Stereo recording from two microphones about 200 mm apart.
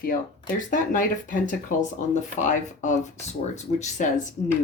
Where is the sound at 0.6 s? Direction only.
40° left (ahead or behind).